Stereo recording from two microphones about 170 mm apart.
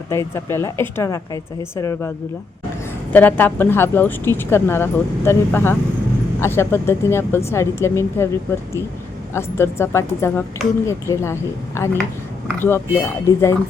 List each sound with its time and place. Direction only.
0.1 s a woman's voice: 15° left (ahead or behind)
9.3 s a woman's voice: 15° left (ahead or behind)